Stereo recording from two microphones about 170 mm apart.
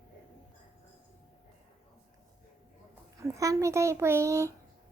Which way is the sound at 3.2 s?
20° right (ahead or behind).